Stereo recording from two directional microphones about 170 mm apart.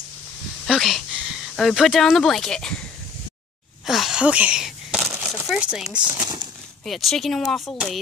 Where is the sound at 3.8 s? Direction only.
Centre (ahead or behind).